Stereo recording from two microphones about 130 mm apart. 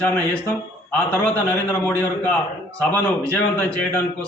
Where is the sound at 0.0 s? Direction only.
10° left (ahead or behind).